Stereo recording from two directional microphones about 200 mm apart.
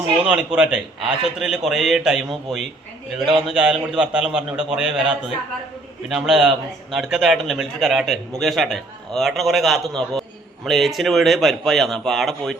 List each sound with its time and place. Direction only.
0.2 s a man's voice: 5° right (ahead or behind)